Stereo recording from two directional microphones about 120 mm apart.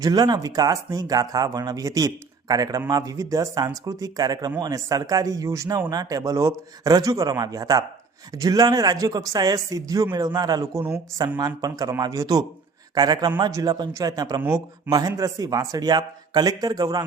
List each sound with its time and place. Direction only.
0.0 s a man's voice: 35° right (ahead or behind)
10.8 s a man's voice: 20° right (ahead or behind)
11.3 s speech: 30° right (ahead or behind)